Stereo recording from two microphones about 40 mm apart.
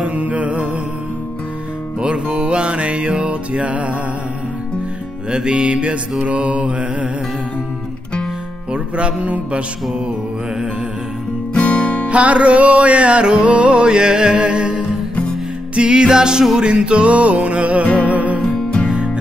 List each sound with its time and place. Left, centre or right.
0.0 s music: right
2.0 s music: right
5.3 s music: right
8.7 s music: right
11.5 s music: left
12.1 s music: right
18.4 s music: left